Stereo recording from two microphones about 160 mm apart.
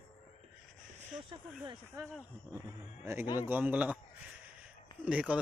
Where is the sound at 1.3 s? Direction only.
30° right (ahead or behind).